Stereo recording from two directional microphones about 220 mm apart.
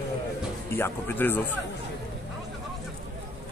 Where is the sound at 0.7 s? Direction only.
10° left (ahead or behind).